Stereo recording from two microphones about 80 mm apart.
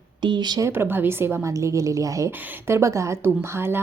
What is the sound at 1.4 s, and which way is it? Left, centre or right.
A woman's voice, right.